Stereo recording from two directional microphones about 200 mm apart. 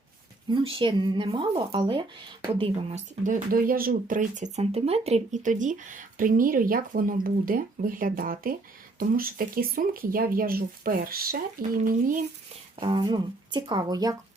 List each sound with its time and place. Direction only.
0.8 s speech: 25° right (ahead or behind)
3.2 s speech: 45° right (ahead or behind)
12.8 s speech: 20° right (ahead or behind)